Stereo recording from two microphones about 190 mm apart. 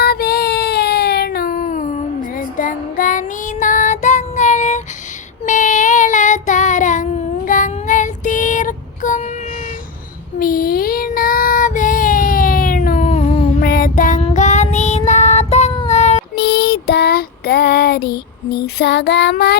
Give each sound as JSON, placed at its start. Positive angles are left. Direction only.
{"t": 0.0, "sound": "child singing", "side_deg": 55}
{"t": 10.4, "sound": "child singing", "side_deg": 50}
{"t": 13.6, "sound": "child singing", "side_deg": 50}
{"t": 15.9, "sound": "cat", "side_deg": 35}
{"t": 16.3, "sound": "child singing", "side_deg": 55}